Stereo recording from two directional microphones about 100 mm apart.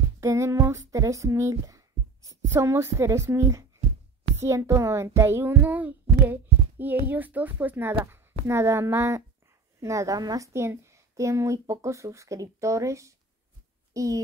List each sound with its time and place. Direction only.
0.2 s a child's voice: 30° right (ahead or behind)